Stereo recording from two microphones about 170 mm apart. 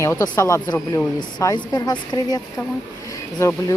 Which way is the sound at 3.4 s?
15° left (ahead or behind).